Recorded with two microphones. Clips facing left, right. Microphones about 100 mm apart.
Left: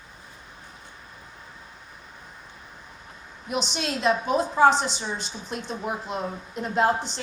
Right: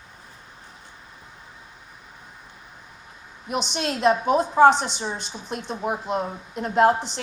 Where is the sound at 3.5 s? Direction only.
50° right (ahead or behind).